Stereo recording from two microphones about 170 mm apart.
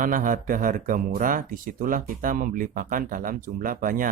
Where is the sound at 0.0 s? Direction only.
50° right (ahead or behind).